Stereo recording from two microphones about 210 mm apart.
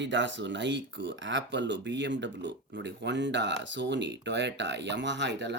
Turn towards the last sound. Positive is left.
turn(degrees=-55)  # may be behind; listen again after turning